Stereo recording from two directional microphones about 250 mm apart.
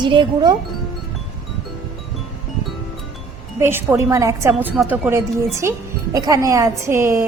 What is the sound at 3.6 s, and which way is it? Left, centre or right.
A woman's voice, centre.